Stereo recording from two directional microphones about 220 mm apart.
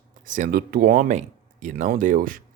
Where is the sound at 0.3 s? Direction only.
35° right (ahead or behind).